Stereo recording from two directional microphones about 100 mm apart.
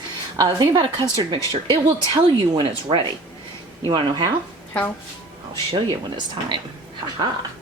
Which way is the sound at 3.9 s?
45° right (ahead or behind).